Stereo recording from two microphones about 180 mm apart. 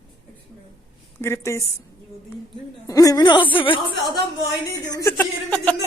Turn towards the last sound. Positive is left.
turn(degrees=10)  # may be behind; listen again after turning